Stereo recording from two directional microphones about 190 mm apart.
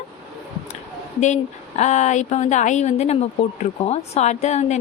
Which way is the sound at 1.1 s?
40° left (ahead or behind).